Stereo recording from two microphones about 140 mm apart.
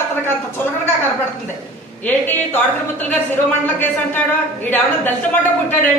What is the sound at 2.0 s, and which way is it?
A man's voice, 10° left (ahead or behind).